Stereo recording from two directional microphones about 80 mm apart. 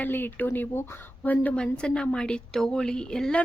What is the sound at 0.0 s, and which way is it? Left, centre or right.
Speech, left.